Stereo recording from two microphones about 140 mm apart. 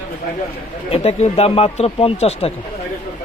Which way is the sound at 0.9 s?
45° left (ahead or behind).